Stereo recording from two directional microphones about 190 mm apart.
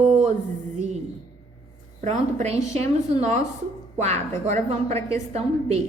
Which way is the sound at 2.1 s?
40° right (ahead or behind).